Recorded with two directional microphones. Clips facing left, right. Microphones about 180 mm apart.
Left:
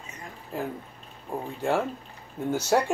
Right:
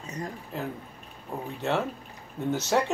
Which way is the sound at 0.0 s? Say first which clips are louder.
Right 8 dB; 40° right (ahead or behind).